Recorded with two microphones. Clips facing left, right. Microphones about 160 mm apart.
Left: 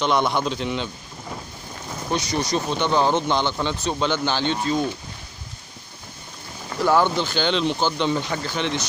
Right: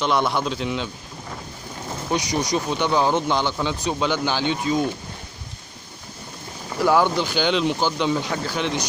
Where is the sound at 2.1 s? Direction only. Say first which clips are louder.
Right 1 dB; 15° right (ahead or behind).